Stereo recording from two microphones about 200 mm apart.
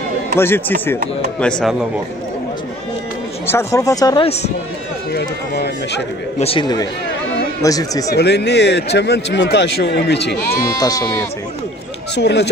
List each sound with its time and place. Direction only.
0.4 s speech: 10° left (ahead or behind)
3.4 s speech: 15° left (ahead or behind)
5.1 s speech: 55° left (ahead or behind)
6.4 s speech: 25° left (ahead or behind)
8.1 s speech: 55° left (ahead or behind)
10.8 s speech: 20° left (ahead or behind)
12.2 s speech: 60° left (ahead or behind)